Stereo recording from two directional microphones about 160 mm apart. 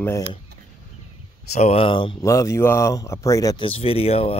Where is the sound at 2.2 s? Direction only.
20° left (ahead or behind).